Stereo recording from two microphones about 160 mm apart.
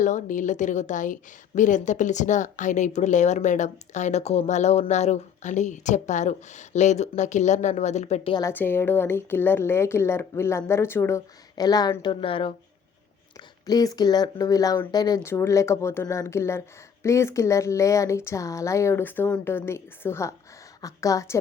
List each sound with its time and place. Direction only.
0.0 s a woman's voice: 55° left (ahead or behind)
8.4 s speech: 15° left (ahead or behind); by 12.5 s 35° left (ahead or behind)
13.3 s a woman's voice: 25° left (ahead or behind)